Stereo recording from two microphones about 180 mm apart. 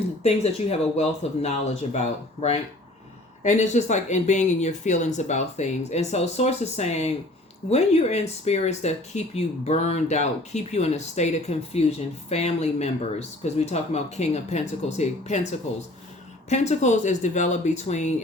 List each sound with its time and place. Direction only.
0.2 s speech: 35° left (ahead or behind)
3.4 s speech: 40° left (ahead or behind)
16.5 s speech: 40° left (ahead or behind)